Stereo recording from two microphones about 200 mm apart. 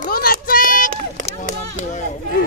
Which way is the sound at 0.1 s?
50° left (ahead or behind).